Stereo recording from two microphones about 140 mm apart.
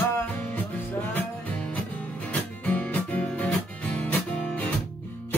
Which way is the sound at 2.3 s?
10° left (ahead or behind).